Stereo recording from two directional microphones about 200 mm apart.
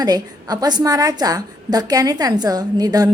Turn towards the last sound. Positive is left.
turn(degrees=-20)  # may be behind; listen again after turning